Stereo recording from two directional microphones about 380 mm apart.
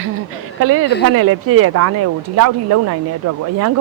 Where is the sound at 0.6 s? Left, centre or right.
Right.